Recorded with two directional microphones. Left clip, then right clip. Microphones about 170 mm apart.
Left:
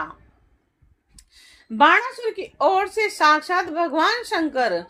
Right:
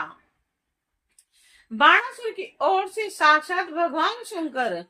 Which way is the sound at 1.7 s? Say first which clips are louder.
Left 1 dB; 45° left (ahead or behind).